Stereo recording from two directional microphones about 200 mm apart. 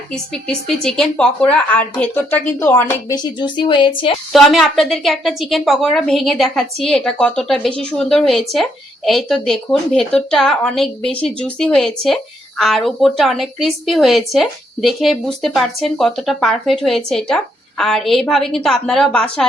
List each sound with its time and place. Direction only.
0.1 s speech: 5° left (ahead or behind)
3.3 s a woman's voice: 25° left (ahead or behind)
4.3 s a woman's voice: centre (ahead or behind)